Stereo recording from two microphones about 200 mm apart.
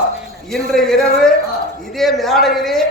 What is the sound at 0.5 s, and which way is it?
A man's voice, centre (ahead or behind).